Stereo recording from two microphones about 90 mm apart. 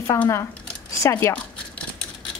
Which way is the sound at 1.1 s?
15° left (ahead or behind).